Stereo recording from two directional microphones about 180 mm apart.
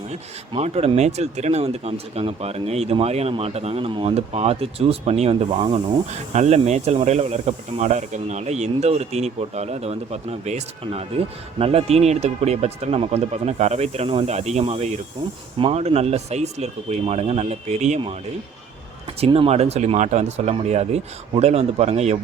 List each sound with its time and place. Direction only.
0.1 s speech: 35° right (ahead or behind)
19.2 s speech: 30° right (ahead or behind)